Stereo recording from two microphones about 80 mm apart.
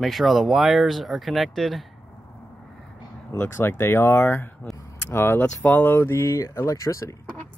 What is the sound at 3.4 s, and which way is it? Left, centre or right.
Speech, left.